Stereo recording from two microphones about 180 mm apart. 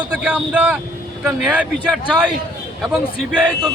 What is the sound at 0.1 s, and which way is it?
A man's voice, 5° right (ahead or behind).